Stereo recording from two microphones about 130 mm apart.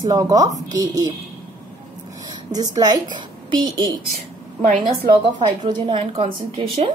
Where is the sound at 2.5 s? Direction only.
30° right (ahead or behind); by 6.9 s 45° right (ahead or behind).